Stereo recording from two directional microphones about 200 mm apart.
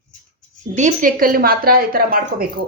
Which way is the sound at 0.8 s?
40° right (ahead or behind).